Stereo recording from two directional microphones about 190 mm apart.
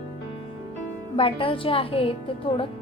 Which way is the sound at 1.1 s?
30° left (ahead or behind).